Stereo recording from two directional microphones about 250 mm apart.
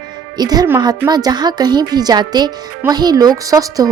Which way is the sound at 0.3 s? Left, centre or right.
Centre.